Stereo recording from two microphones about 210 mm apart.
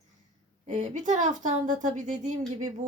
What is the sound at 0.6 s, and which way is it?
Speech, 35° right (ahead or behind).